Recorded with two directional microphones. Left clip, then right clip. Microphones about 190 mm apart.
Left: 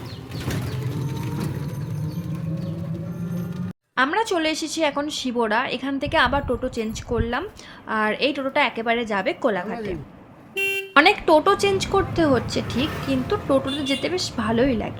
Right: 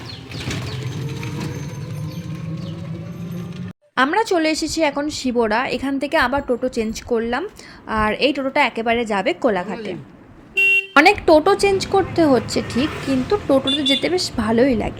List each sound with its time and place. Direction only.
3.9 s speech: 25° right (ahead or behind)